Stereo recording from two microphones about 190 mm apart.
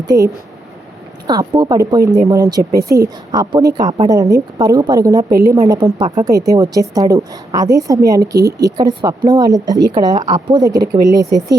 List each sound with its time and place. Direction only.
0.1 s speech: 50° right (ahead or behind)
1.3 s speech: 20° right (ahead or behind)
2.9 s speech: 55° right (ahead or behind)
3.3 s speech: 20° right (ahead or behind)